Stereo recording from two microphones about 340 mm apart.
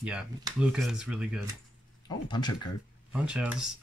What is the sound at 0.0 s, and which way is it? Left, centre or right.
Speech, centre.